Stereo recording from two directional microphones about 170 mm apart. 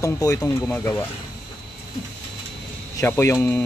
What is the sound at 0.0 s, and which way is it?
Speech, 15° left (ahead or behind).